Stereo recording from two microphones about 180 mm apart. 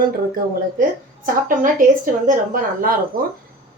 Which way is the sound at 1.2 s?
50° right (ahead or behind).